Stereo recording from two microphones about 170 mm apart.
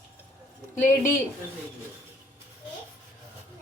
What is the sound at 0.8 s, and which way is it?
Speech, 50° left (ahead or behind).